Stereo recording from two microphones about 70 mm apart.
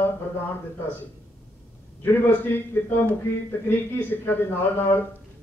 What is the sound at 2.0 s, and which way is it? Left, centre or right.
A man's voice, left.